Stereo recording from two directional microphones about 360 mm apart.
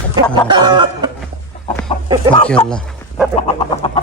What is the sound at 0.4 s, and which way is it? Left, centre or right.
Chicken, centre.